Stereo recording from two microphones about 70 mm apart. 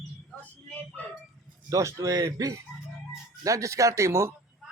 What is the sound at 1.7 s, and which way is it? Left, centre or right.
Speech, right.